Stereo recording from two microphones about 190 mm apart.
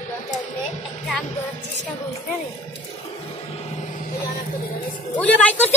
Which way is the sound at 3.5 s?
35° left (ahead or behind).